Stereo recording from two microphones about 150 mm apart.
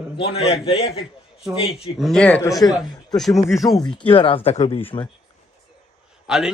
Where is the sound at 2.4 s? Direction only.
25° left (ahead or behind).